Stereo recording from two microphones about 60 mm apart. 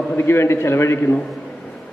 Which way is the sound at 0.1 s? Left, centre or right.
Left.